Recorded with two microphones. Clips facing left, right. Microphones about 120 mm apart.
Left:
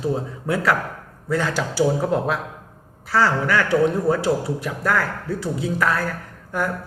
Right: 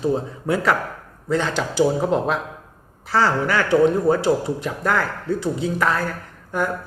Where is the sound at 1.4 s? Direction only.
5° left (ahead or behind).